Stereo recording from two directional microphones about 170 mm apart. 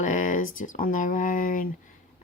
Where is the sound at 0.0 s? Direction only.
50° left (ahead or behind).